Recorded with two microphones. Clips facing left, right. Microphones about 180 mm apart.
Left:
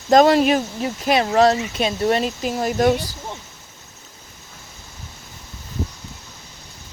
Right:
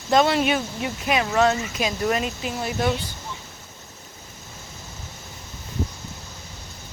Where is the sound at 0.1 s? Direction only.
40° left (ahead or behind).